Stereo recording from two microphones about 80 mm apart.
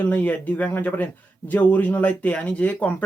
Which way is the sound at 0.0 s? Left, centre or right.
Centre.